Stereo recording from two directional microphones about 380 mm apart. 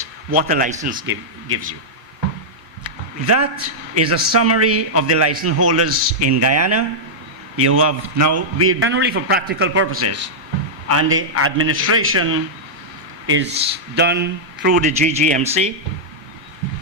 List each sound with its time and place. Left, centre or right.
0.3 s speech: centre
3.2 s a man's voice: right; by 15.7 s centre